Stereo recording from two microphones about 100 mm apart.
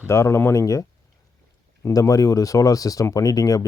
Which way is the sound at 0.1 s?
30° left (ahead or behind).